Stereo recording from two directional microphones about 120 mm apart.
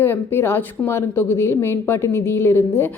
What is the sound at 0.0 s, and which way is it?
Speech, 20° left (ahead or behind).